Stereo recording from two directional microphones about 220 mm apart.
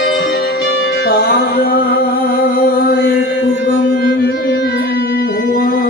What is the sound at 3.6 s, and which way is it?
Music, 50° left (ahead or behind).